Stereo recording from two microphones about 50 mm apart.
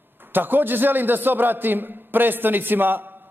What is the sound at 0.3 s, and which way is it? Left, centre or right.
A man's voice, right.